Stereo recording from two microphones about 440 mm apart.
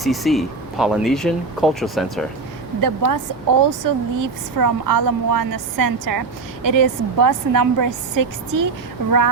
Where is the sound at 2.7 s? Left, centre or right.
Right.